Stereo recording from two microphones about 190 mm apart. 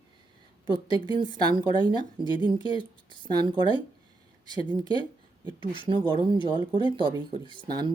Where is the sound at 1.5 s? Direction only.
25° right (ahead or behind).